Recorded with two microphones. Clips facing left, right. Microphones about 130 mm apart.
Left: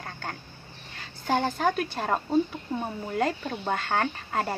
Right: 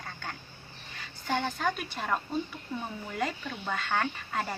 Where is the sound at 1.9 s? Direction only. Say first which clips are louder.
Left 7 dB; 35° left (ahead or behind).